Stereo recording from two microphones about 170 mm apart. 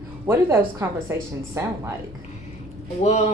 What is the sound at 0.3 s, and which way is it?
Speech, 15° right (ahead or behind).